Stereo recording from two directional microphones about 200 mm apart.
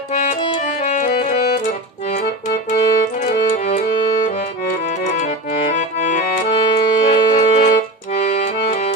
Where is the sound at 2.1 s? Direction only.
35° left (ahead or behind).